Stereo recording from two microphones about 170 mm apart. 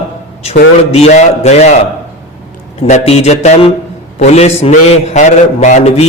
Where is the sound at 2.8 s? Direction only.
40° left (ahead or behind).